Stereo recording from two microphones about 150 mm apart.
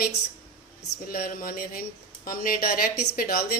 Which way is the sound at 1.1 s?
70° left (ahead or behind).